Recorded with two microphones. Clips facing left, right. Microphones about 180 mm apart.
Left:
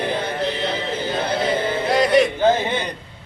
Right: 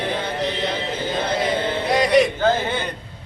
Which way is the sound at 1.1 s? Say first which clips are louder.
Even; 5° left (ahead or behind).